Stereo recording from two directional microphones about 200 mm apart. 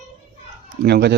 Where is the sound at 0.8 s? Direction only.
55° right (ahead or behind).